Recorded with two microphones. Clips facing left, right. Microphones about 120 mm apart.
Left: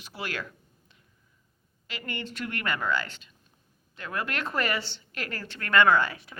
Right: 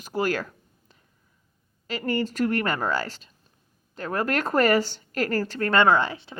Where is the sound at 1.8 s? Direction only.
40° right (ahead or behind).